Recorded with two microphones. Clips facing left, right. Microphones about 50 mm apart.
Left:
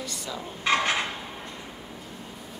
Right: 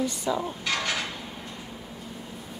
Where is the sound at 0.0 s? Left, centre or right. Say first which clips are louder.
Right 8 dB; right.